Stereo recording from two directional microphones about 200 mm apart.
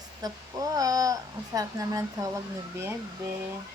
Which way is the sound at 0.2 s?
20° right (ahead or behind).